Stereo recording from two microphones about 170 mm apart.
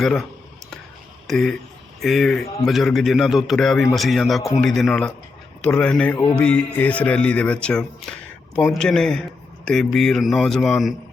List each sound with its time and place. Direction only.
0.0 s a man's voice: centre (ahead or behind)
1.3 s a man's voice: centre (ahead or behind)